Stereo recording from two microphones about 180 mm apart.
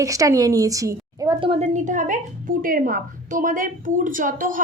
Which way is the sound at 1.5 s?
40° right (ahead or behind).